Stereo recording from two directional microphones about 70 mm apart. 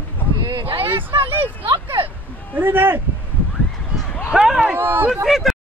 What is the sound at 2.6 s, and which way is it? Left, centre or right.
Speech, right.